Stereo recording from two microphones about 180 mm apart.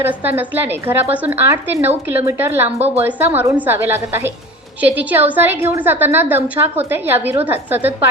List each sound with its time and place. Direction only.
0.0 s a woman's voice: 10° right (ahead or behind)
2.7 s a woman's voice: 35° right (ahead or behind)
3.0 s a woman's voice: 10° right (ahead or behind)